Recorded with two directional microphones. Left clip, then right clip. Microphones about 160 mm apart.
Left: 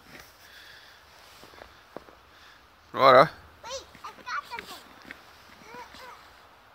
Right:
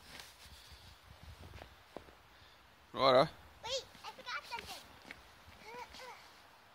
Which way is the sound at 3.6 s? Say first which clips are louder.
Left 3 dB; 40° right (ahead or behind).